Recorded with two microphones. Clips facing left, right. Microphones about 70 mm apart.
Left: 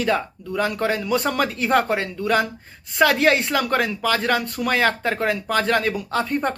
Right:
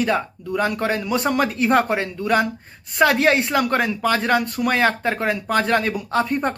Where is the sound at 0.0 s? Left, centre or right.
Centre.